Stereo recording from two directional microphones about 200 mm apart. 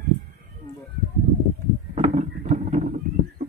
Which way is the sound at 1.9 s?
35° right (ahead or behind).